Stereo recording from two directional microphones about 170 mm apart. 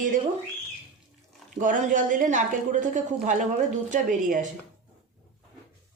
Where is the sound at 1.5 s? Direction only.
50° right (ahead or behind).